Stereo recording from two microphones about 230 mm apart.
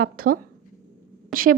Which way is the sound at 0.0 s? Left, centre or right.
Right.